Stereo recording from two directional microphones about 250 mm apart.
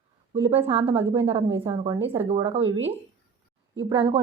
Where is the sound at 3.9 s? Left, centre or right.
Centre.